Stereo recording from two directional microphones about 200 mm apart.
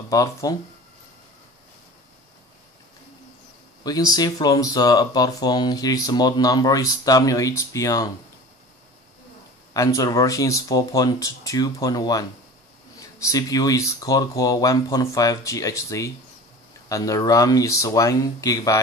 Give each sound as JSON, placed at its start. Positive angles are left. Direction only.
{"t": 0.1, "sound": "speech", "side_deg": 15}
{"t": 3.8, "sound": "speech", "side_deg": 20}
{"t": 9.8, "sound": "speech", "side_deg": 15}